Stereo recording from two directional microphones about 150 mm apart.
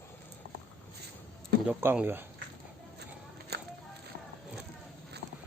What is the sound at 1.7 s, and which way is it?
Speech, 15° right (ahead or behind).